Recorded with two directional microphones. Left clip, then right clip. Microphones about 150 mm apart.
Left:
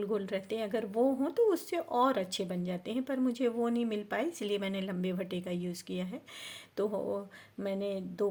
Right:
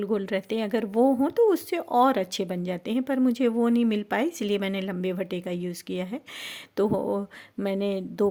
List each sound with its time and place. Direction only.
0.0 s speech: 45° right (ahead or behind)